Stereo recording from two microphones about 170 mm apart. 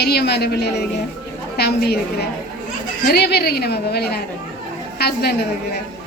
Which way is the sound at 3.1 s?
70° left (ahead or behind).